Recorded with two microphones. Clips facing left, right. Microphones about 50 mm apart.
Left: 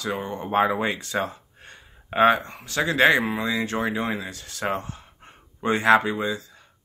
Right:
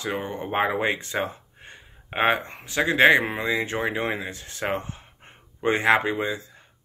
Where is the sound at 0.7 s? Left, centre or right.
Right.